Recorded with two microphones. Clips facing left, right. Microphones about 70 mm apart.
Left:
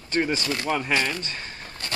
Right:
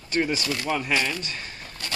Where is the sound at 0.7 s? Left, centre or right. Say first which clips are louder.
Left 1 dB; left.